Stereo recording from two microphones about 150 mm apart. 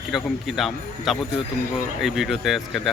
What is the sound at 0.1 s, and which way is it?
Speech, centre (ahead or behind).